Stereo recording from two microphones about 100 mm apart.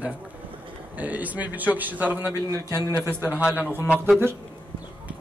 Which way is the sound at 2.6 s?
30° right (ahead or behind).